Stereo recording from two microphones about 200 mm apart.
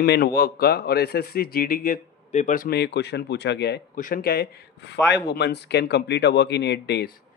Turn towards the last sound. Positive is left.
turn(degrees=55)  # may be behind; listen again after turning